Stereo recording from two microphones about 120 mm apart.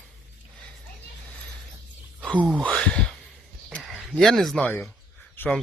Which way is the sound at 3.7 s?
Centre (ahead or behind).